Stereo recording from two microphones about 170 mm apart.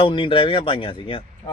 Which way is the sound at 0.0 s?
30° left (ahead or behind).